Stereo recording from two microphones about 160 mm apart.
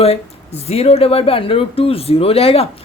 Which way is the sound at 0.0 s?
40° left (ahead or behind).